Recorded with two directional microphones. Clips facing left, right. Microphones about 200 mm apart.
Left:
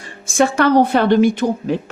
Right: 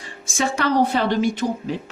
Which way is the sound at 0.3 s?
60° left (ahead or behind).